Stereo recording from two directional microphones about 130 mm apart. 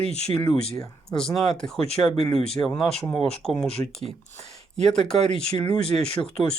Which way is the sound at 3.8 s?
25° left (ahead or behind).